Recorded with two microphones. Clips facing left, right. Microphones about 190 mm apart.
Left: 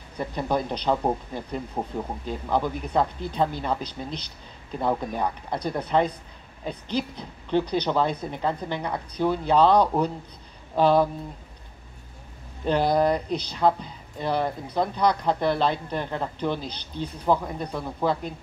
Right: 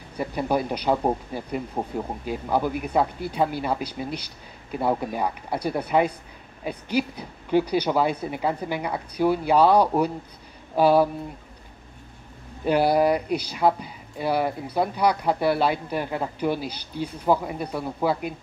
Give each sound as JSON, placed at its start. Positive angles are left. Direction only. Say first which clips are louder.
{"t": 0.2, "sound": "speech", "louder": "right 2 dB", "side_deg": -10}
{"t": 12.6, "sound": "speech", "louder": "right 2 dB", "side_deg": -10}